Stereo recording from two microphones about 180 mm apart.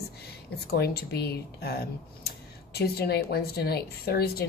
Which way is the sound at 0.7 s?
60° left (ahead or behind).